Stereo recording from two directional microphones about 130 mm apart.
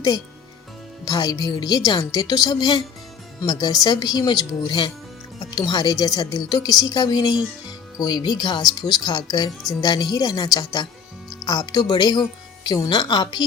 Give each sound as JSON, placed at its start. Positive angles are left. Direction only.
{"t": 1.0, "sound": "a woman's voice", "side_deg": 30}